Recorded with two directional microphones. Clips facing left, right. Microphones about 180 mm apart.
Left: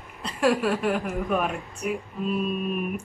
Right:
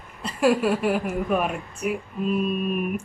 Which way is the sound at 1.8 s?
5° right (ahead or behind).